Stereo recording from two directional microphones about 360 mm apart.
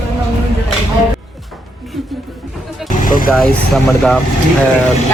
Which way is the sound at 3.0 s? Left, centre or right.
Left.